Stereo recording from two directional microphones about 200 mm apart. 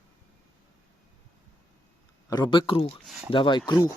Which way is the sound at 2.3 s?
20° left (ahead or behind).